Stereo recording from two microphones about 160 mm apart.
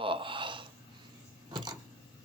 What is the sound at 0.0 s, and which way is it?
Snort, 35° right (ahead or behind).